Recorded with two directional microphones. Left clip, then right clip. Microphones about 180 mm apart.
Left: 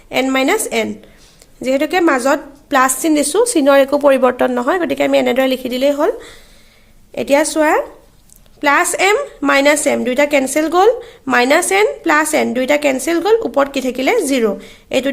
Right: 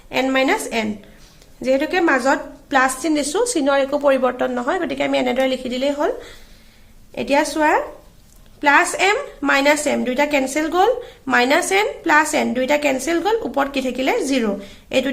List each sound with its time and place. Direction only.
0.1 s a woman's voice: 40° left (ahead or behind)